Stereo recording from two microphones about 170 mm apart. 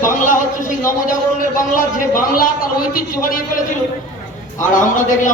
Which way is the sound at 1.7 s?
55° left (ahead or behind).